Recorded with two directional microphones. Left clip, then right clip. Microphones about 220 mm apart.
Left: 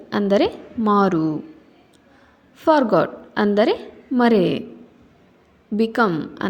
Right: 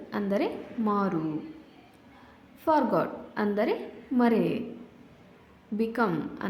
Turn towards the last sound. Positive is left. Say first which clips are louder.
# left 9 dB
turn(degrees=25)  # may be behind; listen again after turning